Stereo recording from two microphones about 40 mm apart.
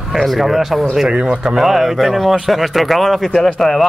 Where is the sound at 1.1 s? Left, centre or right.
Centre.